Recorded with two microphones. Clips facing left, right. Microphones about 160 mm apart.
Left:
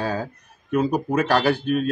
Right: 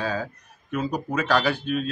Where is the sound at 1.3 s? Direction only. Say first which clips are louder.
Left 2 dB; 45° left (ahead or behind).